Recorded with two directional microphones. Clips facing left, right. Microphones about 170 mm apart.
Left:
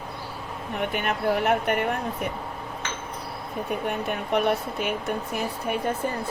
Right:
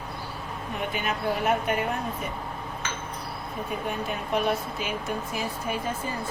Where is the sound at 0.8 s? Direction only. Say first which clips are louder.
Left 3 dB; 60° left (ahead or behind).